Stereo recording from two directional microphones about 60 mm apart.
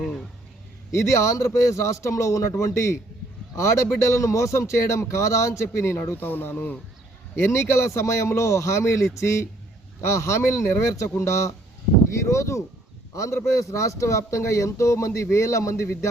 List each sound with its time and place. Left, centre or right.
0.9 s speech: left
7.3 s speech: left